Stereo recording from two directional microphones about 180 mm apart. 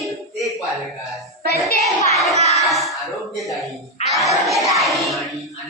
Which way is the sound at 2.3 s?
40° right (ahead or behind).